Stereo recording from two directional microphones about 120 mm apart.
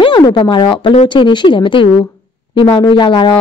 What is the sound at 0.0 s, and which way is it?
Speech, 45° left (ahead or behind).